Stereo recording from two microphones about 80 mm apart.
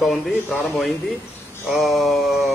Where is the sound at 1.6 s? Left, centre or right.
Centre.